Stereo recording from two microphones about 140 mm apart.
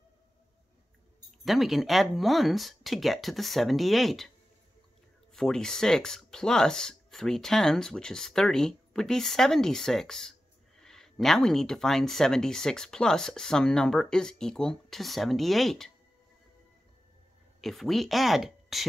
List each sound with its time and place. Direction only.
1.4 s speech: centre (ahead or behind)
5.3 s speech: 5° left (ahead or behind)
17.6 s speech: centre (ahead or behind)